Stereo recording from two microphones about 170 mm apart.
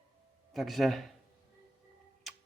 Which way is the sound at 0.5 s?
Centre (ahead or behind).